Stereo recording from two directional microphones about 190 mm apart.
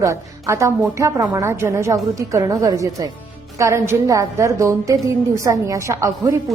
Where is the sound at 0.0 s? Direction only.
15° right (ahead or behind).